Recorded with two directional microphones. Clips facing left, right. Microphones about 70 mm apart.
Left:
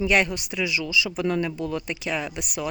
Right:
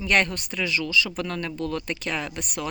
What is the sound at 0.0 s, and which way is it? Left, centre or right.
Speech, centre.